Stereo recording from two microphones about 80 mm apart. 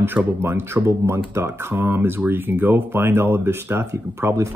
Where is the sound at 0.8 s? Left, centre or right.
Right.